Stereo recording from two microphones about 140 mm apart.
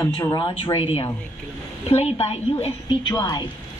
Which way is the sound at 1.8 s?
45° left (ahead or behind).